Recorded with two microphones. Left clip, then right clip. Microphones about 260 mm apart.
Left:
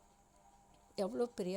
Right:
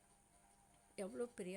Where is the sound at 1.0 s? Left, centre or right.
Centre.